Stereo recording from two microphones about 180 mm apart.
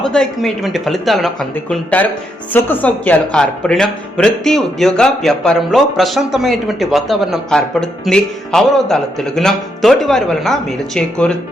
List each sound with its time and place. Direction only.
0.0 s speech: 5° left (ahead or behind)